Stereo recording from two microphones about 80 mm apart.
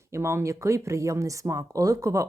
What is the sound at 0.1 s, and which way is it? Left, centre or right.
Speech, right.